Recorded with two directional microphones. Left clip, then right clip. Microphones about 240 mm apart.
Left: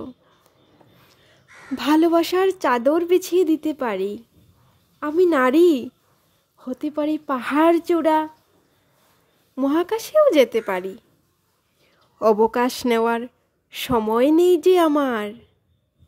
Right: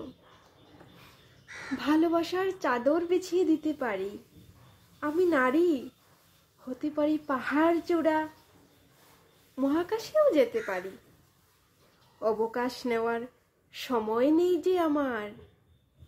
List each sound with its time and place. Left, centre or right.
1.8 s speech: left
9.6 s speech: left
12.2 s speech: left